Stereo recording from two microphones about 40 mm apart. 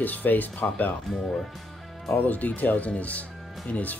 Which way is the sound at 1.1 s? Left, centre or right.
Centre.